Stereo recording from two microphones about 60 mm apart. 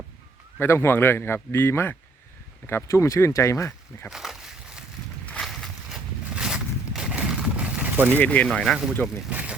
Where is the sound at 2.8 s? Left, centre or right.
Left.